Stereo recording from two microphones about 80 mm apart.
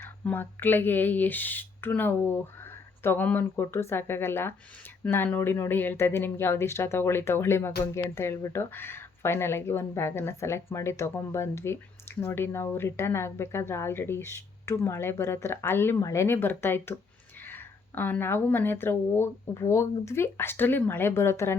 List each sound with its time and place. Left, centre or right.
0.3 s a woman's voice: left
16.0 s speech: left